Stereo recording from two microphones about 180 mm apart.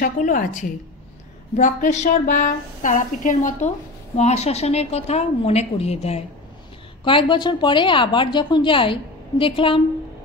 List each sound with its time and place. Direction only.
0.0 s a woman's voice: 50° left (ahead or behind); by 9.8 s 30° left (ahead or behind)